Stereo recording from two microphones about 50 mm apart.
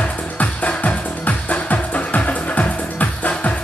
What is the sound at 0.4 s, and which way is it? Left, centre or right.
Music, left.